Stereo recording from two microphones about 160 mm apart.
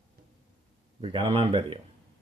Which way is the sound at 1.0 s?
35° right (ahead or behind).